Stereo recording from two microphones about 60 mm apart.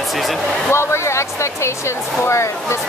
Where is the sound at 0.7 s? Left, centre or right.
Left.